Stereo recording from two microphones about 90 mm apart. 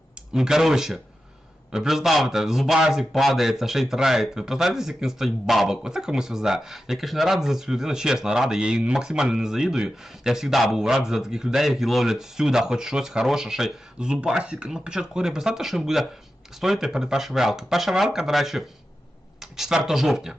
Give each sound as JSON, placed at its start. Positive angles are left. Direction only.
{"t": 0.3, "sound": "a man's voice", "side_deg": -5}